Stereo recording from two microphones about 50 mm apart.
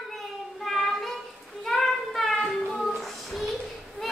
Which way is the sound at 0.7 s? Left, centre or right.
Centre.